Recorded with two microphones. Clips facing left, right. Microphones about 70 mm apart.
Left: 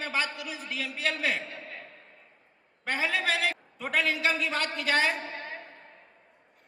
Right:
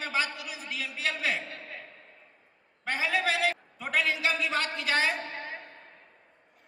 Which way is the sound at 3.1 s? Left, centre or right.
Centre.